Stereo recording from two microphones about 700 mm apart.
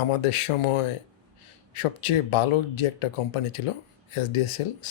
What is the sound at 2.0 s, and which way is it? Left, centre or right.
Speech, left.